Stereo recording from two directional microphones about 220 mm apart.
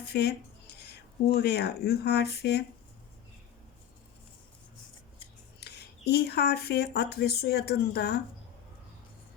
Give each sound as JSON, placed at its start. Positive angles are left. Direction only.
{"t": 0.1, "sound": "speech", "side_deg": 50}
{"t": 5.5, "sound": "speech", "side_deg": 50}